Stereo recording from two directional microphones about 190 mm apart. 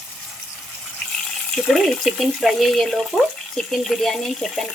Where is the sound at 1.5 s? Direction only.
Centre (ahead or behind).